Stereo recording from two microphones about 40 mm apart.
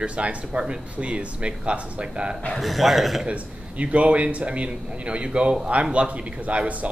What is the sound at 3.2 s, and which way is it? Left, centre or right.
A man's voice, right.